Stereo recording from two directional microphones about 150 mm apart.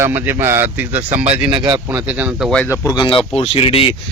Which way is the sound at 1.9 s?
10° right (ahead or behind).